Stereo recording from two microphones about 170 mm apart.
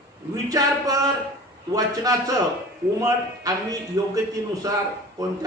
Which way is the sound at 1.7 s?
20° right (ahead or behind).